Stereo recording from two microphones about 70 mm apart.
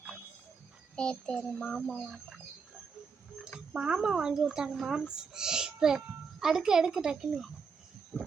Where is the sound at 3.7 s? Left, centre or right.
Centre.